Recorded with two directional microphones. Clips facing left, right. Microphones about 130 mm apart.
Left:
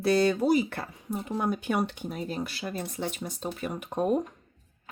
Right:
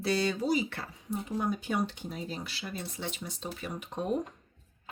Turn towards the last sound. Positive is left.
turn(degrees=50)  # may be behind; listen again after turning